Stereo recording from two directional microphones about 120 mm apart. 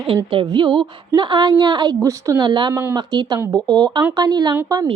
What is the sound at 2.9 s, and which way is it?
A woman's voice, 35° right (ahead or behind).